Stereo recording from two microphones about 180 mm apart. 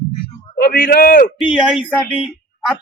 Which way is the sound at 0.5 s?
55° left (ahead or behind).